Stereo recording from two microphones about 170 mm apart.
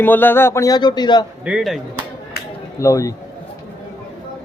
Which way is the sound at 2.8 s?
20° left (ahead or behind).